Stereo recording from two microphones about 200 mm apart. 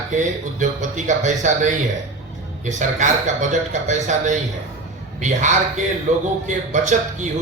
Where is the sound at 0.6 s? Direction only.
40° right (ahead or behind).